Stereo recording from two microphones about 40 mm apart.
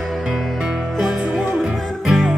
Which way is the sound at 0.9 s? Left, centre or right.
Centre.